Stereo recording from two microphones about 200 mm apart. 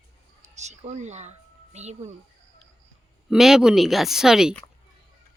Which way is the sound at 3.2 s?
Centre (ahead or behind).